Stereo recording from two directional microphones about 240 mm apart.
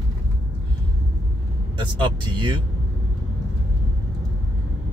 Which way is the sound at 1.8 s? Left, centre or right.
Centre.